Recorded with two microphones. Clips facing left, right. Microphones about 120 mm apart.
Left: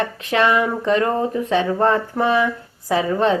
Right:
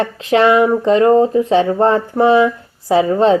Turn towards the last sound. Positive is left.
turn(degrees=-25)  # may be behind; listen again after turning